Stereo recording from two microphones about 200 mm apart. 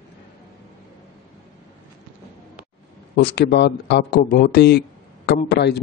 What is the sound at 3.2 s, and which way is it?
A man's voice, 60° left (ahead or behind).